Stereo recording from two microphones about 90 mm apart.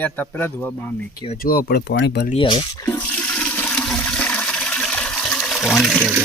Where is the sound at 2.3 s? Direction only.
70° left (ahead or behind).